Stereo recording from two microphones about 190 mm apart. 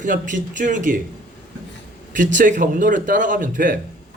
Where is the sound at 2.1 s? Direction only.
45° right (ahead or behind).